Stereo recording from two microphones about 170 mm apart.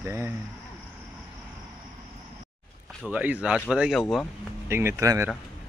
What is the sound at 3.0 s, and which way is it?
Speech, 10° right (ahead or behind).